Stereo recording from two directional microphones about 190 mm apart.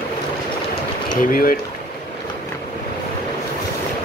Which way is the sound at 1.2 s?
45° left (ahead or behind).